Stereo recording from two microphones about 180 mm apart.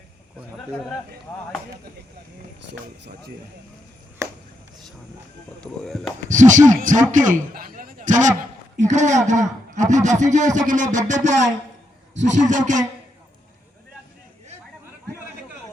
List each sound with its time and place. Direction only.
0.7 s speech: centre (ahead or behind)
5.5 s speech: centre (ahead or behind)
6.2 s music: 45° right (ahead or behind)
7.5 s a sound: 55° right (ahead or behind)
8.8 s a man's voice: 40° right (ahead or behind)
10.7 s music: 45° right (ahead or behind)